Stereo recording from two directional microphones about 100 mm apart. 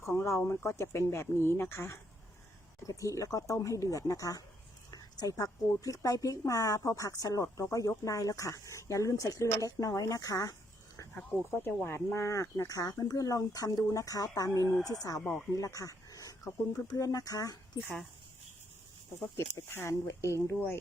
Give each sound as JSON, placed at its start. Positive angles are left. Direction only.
{"t": 0.0, "sound": "speech", "side_deg": 30}
{"t": 11.6, "sound": "speech", "side_deg": 25}
{"t": 19.5, "sound": "speech", "side_deg": 25}